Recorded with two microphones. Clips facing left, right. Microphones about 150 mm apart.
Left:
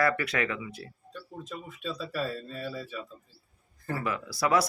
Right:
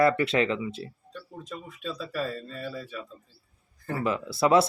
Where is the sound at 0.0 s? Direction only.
25° right (ahead or behind).